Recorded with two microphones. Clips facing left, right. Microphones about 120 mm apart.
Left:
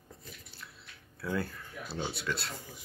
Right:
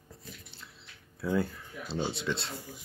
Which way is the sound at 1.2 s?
20° right (ahead or behind).